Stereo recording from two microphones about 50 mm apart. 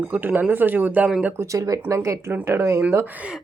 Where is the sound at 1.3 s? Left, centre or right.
Right.